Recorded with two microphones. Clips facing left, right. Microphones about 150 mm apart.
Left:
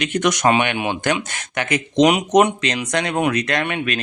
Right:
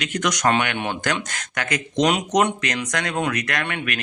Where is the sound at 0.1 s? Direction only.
25° left (ahead or behind).